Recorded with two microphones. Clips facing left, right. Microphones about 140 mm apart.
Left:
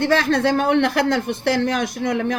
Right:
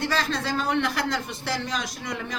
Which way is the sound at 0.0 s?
55° left (ahead or behind).